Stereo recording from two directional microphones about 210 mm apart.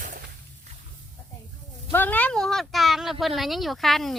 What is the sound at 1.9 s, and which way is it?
Speech, 10° left (ahead or behind).